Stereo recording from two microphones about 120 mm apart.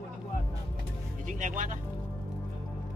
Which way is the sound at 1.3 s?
90° right.